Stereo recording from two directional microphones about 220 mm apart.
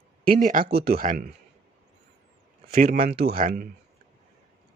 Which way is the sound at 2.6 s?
40° right (ahead or behind).